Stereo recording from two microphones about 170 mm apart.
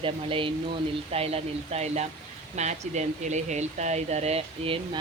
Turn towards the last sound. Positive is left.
turn(degrees=-35)  # may be behind; listen again after turning